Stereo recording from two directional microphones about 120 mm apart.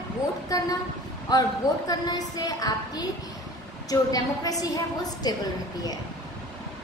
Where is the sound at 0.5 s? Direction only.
30° left (ahead or behind).